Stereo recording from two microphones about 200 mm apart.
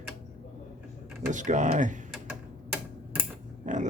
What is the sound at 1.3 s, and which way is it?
Speech, 40° right (ahead or behind).